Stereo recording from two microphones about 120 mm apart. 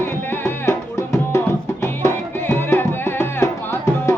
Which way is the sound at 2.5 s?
20° left (ahead or behind).